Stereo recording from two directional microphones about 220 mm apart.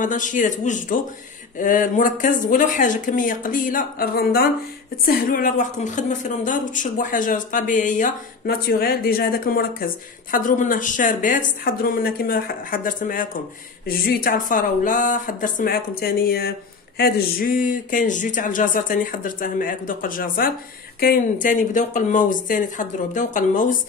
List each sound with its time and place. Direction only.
0.0 s speech: 35° left (ahead or behind)